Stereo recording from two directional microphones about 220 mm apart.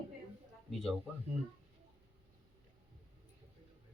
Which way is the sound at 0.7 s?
5° left (ahead or behind).